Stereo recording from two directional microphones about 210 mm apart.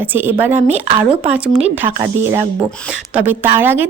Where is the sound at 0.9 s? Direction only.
25° right (ahead or behind).